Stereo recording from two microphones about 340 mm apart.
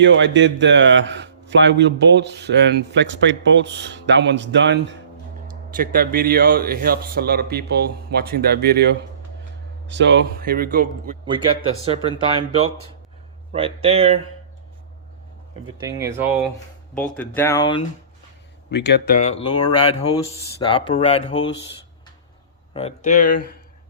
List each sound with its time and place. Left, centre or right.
0.0 s a man's voice: right; by 14.2 s centre
15.6 s speech: centre
18.7 s speech: left
22.7 s speech: centre